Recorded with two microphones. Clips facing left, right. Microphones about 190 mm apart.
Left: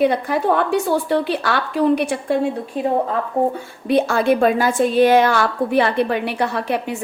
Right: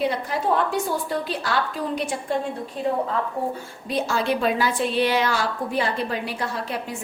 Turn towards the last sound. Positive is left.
turn(degrees=65)  # may be behind; listen again after turning